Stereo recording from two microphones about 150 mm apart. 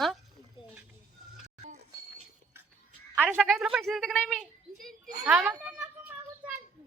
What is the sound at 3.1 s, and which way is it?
A woman's voice, 10° right (ahead or behind).